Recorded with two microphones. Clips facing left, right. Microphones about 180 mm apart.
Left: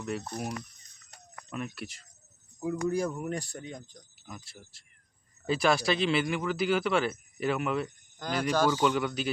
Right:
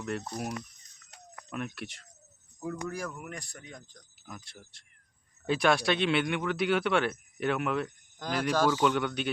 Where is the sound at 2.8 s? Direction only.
25° left (ahead or behind).